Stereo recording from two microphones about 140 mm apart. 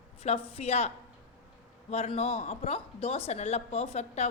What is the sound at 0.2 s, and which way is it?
Speech, 45° left (ahead or behind).